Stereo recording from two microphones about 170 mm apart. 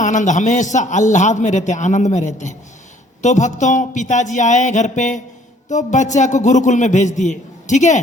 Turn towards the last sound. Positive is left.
turn(degrees=45)  # may be behind; listen again after turning